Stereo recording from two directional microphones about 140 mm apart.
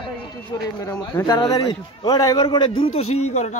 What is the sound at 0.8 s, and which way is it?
A man's voice, 20° left (ahead or behind).